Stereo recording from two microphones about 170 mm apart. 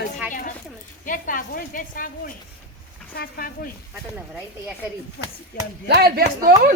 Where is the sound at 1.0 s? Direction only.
50° left (ahead or behind).